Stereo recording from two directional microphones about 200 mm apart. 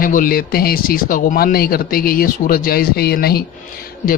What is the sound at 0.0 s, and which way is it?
Speech, 45° left (ahead or behind).